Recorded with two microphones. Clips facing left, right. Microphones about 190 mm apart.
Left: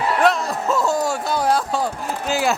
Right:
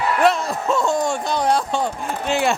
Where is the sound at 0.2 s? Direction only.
Centre (ahead or behind).